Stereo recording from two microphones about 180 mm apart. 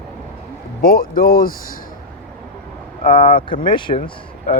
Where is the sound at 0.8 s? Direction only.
55° left (ahead or behind).